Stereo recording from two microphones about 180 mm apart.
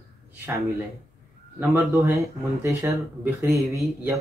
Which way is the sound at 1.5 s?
15° right (ahead or behind).